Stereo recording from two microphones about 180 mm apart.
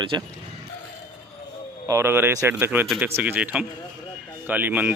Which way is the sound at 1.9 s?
15° right (ahead or behind).